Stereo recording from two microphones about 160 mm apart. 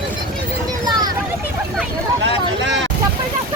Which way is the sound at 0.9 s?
25° right (ahead or behind).